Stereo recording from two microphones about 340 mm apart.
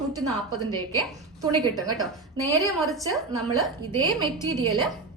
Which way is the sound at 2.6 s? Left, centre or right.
Centre.